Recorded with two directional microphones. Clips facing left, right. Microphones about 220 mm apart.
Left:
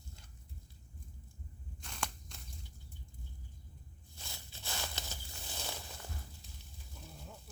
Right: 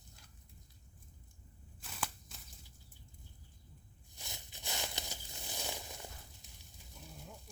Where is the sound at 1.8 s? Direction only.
5° right (ahead or behind).